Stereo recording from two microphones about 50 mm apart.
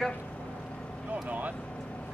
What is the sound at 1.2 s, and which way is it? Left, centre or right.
Speech, right.